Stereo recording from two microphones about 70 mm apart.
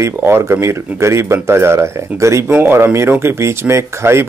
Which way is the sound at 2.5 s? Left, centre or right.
Right.